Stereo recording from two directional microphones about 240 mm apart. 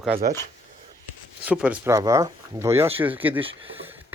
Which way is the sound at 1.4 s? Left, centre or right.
Centre.